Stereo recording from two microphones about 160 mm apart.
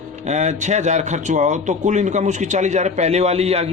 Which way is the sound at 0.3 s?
45° right (ahead or behind).